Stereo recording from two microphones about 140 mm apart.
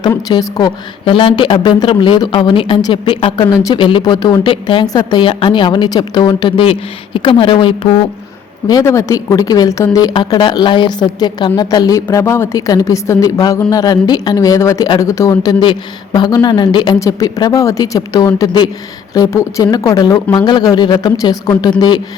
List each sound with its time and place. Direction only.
0.1 s a woman's voice: 25° left (ahead or behind)
8.6 s a woman's voice: 25° left (ahead or behind)
15.6 s a woman's voice: 35° left (ahead or behind)